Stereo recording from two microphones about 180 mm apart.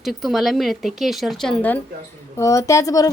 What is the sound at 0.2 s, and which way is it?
A woman's voice, centre (ahead or behind).